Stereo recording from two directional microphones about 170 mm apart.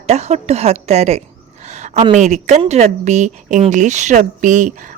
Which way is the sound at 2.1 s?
45° right (ahead or behind).